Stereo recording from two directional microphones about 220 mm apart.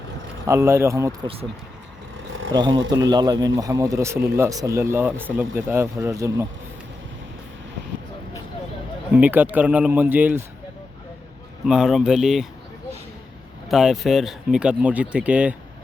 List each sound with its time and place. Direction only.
0.4 s speech: 15° right (ahead or behind)
2.5 s speech: 20° right (ahead or behind)
9.1 s speech: 5° right (ahead or behind)
11.6 s speech: 5° right (ahead or behind)
13.7 s speech: centre (ahead or behind)